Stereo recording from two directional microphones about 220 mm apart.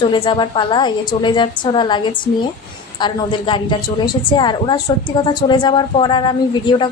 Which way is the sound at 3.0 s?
20° left (ahead or behind).